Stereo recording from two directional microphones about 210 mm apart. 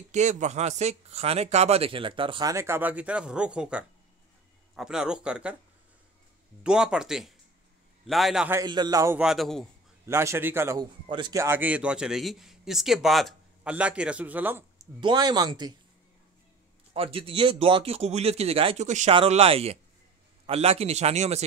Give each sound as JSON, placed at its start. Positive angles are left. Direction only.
{"t": 0.1, "sound": "speech", "side_deg": -35}
{"t": 6.6, "sound": "speech", "side_deg": -5}
{"t": 8.5, "sound": "a man's voice", "side_deg": -20}
{"t": 9.2, "sound": "speech", "side_deg": 0}
{"t": 10.0, "sound": "a man's voice", "side_deg": -10}
{"t": 15.0, "sound": "speech", "side_deg": -20}
{"t": 16.9, "sound": "speech", "side_deg": -25}